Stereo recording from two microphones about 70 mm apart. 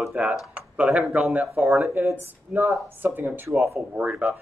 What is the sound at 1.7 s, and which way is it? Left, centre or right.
Speech, centre.